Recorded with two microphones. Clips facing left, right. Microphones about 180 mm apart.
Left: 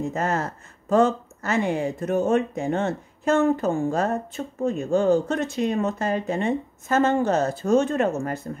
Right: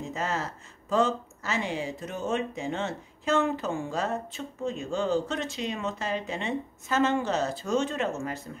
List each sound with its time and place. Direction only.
0.0 s speech: 55° left (ahead or behind)